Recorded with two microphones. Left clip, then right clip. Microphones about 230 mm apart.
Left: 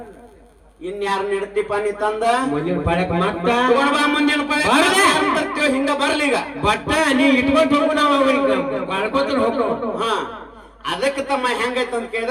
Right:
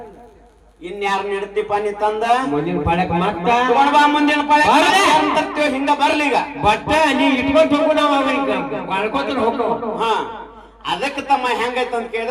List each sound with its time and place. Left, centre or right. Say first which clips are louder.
0.9 s a man's voice: right 1 dB; left